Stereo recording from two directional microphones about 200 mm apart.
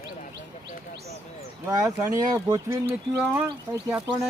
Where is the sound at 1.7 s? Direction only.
15° right (ahead or behind).